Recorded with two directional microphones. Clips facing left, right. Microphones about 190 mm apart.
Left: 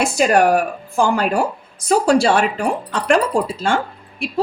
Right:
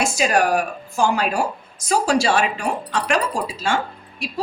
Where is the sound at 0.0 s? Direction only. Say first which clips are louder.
Left 4 dB; 55° left (ahead or behind).